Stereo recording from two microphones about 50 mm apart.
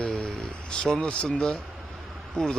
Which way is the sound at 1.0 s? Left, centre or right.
Centre.